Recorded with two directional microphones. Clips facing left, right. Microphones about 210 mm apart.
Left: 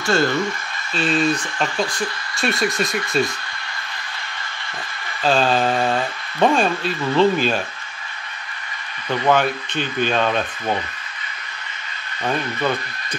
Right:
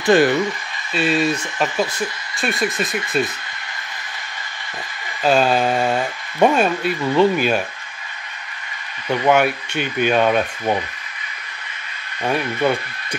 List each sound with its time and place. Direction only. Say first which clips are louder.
0.0 s speech: right 5 dB; 15° right (ahead or behind)
0.9 s speech: right 1 dB; 5° right (ahead or behind)
5.2 s speech: right 2 dB; 10° right (ahead or behind)
9.3 s speech: right 2 dB; 10° right (ahead or behind)
12.2 s speech: right 3 dB; 10° right (ahead or behind)